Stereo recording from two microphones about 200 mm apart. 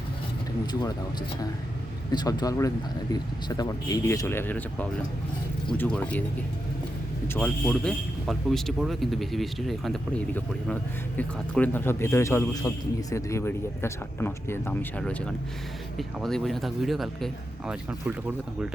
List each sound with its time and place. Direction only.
0.7 s speech: 20° left (ahead or behind)
2.1 s a man's voice: 20° left (ahead or behind)
7.3 s a man's voice: 5° left (ahead or behind)